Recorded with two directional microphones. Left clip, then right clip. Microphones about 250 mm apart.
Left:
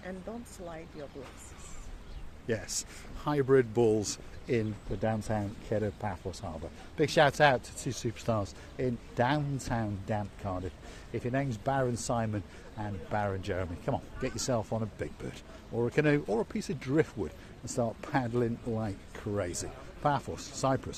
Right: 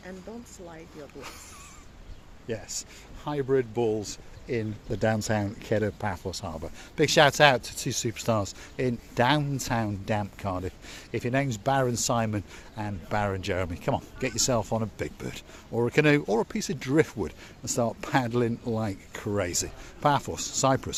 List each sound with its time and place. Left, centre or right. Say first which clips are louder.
2.5 s speech: even; centre
4.9 s speech: right 6 dB; right